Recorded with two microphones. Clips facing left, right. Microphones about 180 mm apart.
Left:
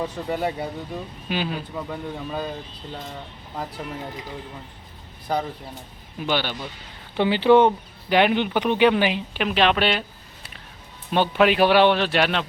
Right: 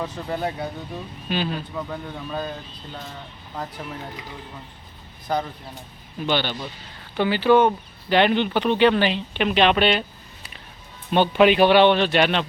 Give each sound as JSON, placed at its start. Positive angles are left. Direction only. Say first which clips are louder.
{"t": 0.3, "sound": "speech", "louder": "left 1 dB", "side_deg": 5}
{"t": 6.1, "sound": "speech", "louder": "right 1 dB", "side_deg": 10}
{"t": 7.2, "sound": "speech", "louder": "left 1 dB", "side_deg": 20}
{"t": 8.1, "sound": "speech", "louder": "even", "side_deg": 10}
{"t": 11.1, "sound": "speech", "louder": "right 2 dB", "side_deg": 0}